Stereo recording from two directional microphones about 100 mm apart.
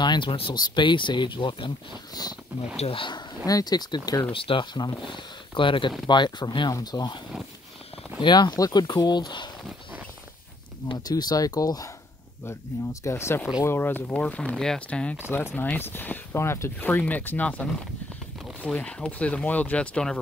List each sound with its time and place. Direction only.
0.0 s speech: 45° left (ahead or behind)
0.3 s speech: 65° left (ahead or behind)
0.6 s speech: 50° left (ahead or behind)
2.8 s speech: 60° left (ahead or behind)
3.4 s speech: 40° left (ahead or behind)
4.3 s speech: 60° left (ahead or behind)
4.7 s speech: 50° left (ahead or behind)
8.2 s speech: 50° left (ahead or behind)
10.9 s speech: 45° left (ahead or behind)
13.0 s speech: 25° left (ahead or behind); by 15.1 s 10° left (ahead or behind)
15.2 s speech: 25° left (ahead or behind)